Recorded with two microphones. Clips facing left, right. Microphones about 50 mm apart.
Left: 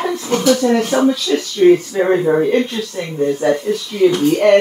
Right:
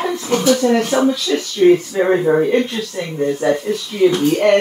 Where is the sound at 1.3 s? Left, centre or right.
Centre.